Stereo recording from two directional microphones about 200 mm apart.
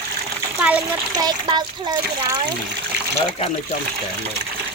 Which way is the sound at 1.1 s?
20° right (ahead or behind).